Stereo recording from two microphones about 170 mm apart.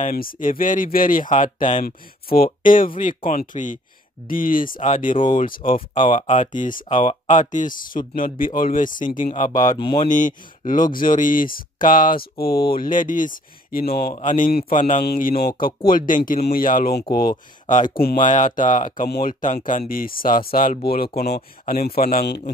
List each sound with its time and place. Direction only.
0.1 s speech: 55° left (ahead or behind)
1.9 s speech: 60° left (ahead or behind)
9.5 s speech: 20° left (ahead or behind)
10.0 s speech: 50° left (ahead or behind)
18.9 s speech: 60° left (ahead or behind)